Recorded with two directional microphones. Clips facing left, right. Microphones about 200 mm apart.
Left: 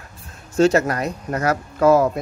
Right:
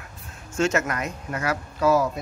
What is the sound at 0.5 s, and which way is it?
Speech, 35° left (ahead or behind).